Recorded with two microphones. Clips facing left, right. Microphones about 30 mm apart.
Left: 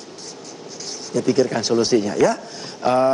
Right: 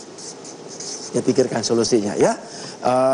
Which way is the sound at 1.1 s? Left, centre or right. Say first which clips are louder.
Even; centre.